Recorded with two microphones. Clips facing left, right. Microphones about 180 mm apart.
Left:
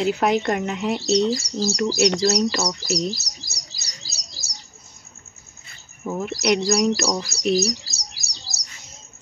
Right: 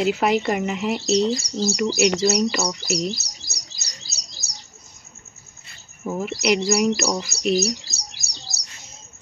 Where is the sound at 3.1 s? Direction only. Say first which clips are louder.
Right 1 dB; 25° right (ahead or behind).